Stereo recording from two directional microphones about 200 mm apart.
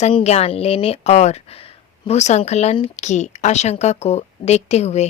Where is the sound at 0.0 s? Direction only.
30° left (ahead or behind).